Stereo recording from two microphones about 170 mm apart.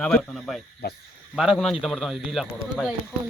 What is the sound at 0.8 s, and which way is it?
Speech, 65° left (ahead or behind).